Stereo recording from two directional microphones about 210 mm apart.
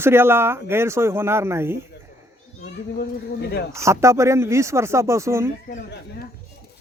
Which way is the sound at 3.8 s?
15° right (ahead or behind).